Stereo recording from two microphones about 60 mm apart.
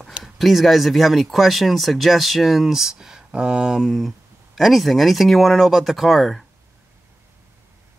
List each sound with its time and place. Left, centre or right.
0.2 s speech: centre